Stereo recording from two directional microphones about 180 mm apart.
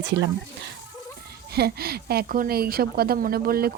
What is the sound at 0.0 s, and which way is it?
Speech, 70° right (ahead or behind).